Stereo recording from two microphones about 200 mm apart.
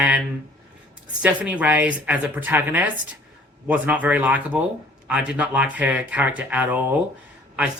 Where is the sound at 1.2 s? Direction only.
5° right (ahead or behind).